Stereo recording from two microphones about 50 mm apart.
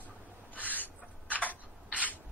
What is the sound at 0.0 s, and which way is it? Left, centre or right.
Owl, left.